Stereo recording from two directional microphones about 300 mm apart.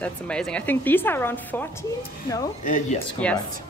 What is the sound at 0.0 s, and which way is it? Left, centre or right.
A woman's voice, centre.